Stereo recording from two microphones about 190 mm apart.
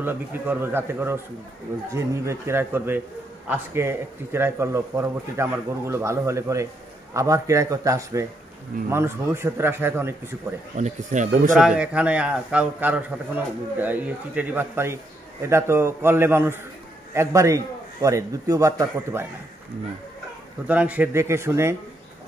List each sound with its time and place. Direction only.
0.0 s a man's voice: 10° right (ahead or behind)
10.8 s speech: 40° right (ahead or behind)
11.5 s a man's voice: 5° right (ahead or behind)
20.6 s a man's voice: 10° right (ahead or behind)